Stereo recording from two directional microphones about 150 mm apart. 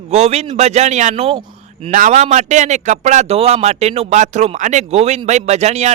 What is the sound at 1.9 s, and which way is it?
A man's voice, 55° right (ahead or behind).